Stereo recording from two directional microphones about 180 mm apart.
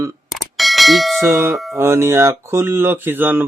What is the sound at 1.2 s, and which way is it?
Speech, 15° right (ahead or behind).